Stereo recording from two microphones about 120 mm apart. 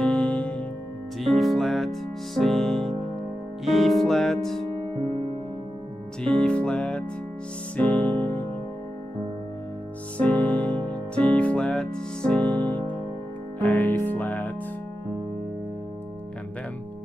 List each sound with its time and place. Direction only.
0.0 s music: 10° left (ahead or behind)
6.2 s music: 10° left (ahead or behind)
10.1 s music: 10° left (ahead or behind)